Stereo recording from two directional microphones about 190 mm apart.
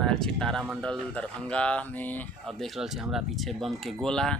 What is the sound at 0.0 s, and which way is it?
Speech, 5° left (ahead or behind).